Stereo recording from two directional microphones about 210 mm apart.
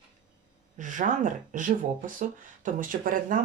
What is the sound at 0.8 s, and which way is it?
Speech, 35° right (ahead or behind).